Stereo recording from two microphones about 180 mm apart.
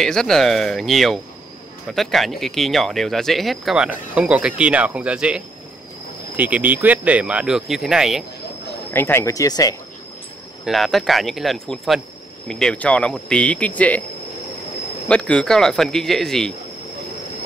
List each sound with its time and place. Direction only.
0.0 s speech: centre (ahead or behind)
8.9 s speech: 15° left (ahead or behind)
10.6 s speech: centre (ahead or behind)
15.0 s speech: 5° left (ahead or behind)